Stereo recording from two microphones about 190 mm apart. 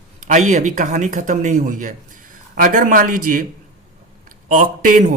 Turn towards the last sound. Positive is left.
turn(degrees=-40)  # may be behind; listen again after turning